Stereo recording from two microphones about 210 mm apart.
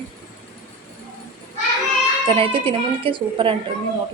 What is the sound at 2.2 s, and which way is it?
Speech, 25° right (ahead or behind).